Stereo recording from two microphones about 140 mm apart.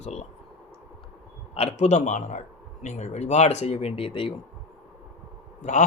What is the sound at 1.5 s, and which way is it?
A man's voice, 50° left (ahead or behind).